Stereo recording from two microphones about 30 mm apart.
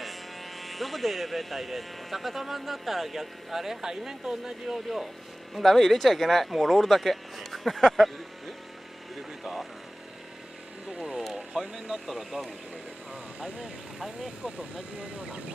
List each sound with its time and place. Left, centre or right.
0.0 s speech: centre
4.8 s speech: centre
5.6 s speech: centre
11.0 s speech: centre
13.1 s speech: right
13.9 s speech: centre